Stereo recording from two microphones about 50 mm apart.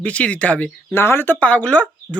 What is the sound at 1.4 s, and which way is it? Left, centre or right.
Speech, left.